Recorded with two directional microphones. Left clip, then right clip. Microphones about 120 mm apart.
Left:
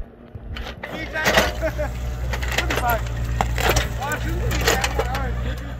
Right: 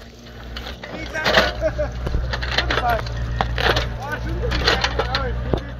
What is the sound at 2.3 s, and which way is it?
Vehicle, 35° left (ahead or behind).